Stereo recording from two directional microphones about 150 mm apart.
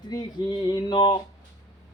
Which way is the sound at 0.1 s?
30° left (ahead or behind).